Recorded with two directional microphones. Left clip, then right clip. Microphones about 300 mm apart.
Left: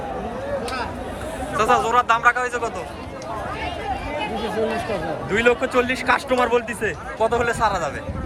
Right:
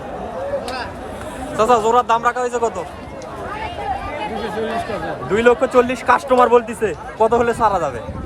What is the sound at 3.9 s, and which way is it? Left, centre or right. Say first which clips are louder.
Chatter: right 3 dB; right.